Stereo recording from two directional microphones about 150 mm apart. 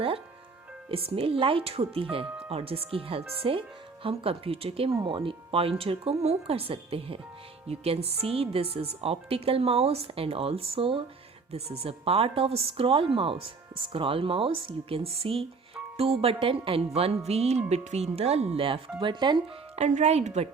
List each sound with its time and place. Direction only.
0.9 s a woman's voice: 40° right (ahead or behind)
19.7 s speech: 50° right (ahead or behind)